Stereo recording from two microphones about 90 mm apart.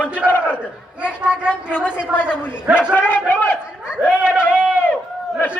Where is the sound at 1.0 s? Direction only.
10° right (ahead or behind).